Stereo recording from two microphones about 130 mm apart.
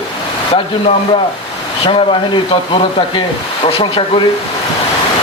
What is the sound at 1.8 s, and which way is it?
Speech, 45° left (ahead or behind).